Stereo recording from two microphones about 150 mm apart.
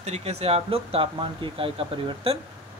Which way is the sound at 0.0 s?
45° right (ahead or behind).